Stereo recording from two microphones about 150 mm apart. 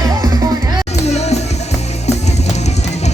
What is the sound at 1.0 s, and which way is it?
Music, 45° left (ahead or behind).